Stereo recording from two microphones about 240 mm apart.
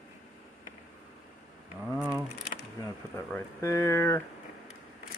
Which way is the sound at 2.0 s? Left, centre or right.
Centre.